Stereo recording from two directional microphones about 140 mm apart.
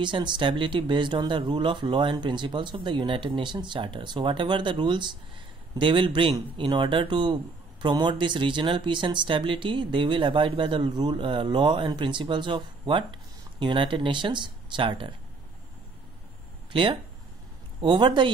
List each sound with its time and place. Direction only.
0.0 s speech: 35° right (ahead or behind)
17.7 s speech: 30° right (ahead or behind)